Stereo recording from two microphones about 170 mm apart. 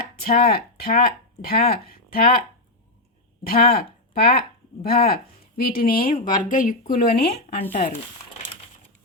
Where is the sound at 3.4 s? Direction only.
60° left (ahead or behind).